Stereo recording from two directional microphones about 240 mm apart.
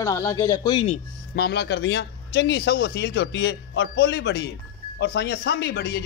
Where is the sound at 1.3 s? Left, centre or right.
Left.